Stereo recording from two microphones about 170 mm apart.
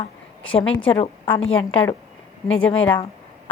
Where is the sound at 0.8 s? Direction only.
30° left (ahead or behind).